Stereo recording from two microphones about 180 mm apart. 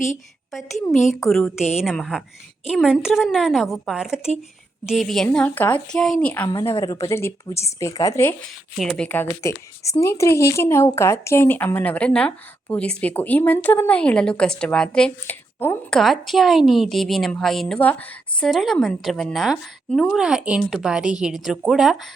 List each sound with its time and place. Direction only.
1.3 s a woman's voice: centre (ahead or behind)
8.8 s a woman's voice: 5° left (ahead or behind)
16.0 s a woman's voice: centre (ahead or behind)